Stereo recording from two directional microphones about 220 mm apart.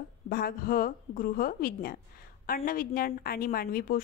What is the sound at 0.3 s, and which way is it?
A woman's voice, 40° left (ahead or behind).